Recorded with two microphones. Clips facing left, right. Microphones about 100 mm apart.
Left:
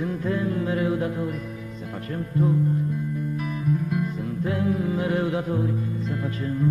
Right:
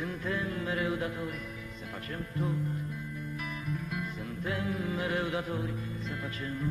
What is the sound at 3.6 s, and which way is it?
Music, 35° left (ahead or behind).